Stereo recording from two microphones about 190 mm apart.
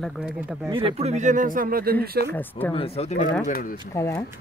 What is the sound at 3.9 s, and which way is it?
Speech, 15° left (ahead or behind).